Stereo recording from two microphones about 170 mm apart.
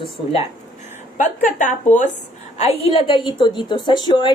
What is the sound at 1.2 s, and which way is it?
A woman's voice, 50° left (ahead or behind).